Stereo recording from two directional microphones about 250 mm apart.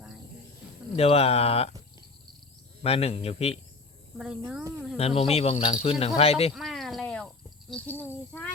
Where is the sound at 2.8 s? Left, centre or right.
Left.